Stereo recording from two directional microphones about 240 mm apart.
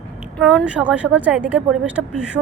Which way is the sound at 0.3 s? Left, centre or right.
Centre.